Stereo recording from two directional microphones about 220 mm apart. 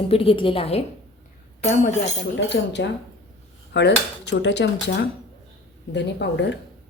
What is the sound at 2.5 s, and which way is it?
Speech, 50° left (ahead or behind).